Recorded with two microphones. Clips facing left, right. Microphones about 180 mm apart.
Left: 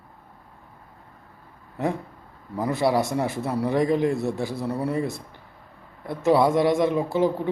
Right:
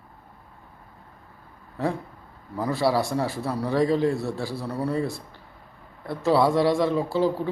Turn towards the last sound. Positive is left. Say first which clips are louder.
# left 1 dB
turn(degrees=20)  # may be behind; listen again after turning